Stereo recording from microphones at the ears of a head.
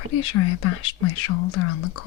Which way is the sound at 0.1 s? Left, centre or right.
Left.